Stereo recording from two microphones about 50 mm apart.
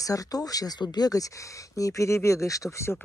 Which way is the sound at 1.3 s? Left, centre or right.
Left.